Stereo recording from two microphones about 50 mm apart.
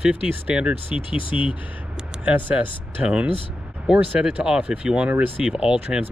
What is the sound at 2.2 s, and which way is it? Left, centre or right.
Speech, right.